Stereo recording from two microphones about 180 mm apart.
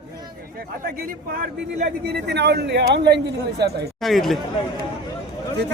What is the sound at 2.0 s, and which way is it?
Speech, 65° right (ahead or behind).